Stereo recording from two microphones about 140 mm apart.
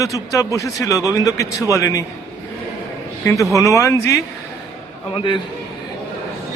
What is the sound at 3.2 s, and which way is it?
Speech, 25° left (ahead or behind).